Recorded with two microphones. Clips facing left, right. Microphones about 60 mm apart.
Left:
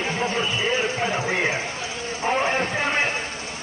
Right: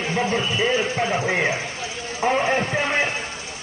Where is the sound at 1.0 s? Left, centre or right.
Right.